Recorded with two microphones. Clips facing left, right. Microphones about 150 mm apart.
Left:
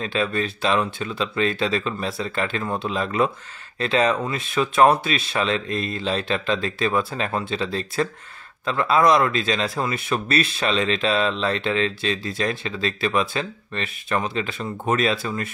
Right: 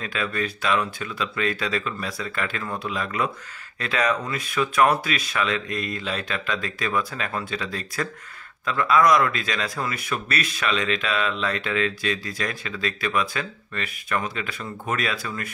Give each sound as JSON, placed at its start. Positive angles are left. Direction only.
{"t": 0.0, "sound": "speech", "side_deg": 30}